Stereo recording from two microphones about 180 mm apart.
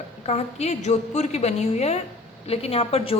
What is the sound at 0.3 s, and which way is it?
A woman's voice, 35° left (ahead or behind).